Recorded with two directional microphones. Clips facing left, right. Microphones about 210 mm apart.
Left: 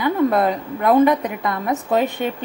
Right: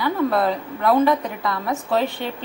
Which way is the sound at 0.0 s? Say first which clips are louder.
Left 3 dB; 20° left (ahead or behind).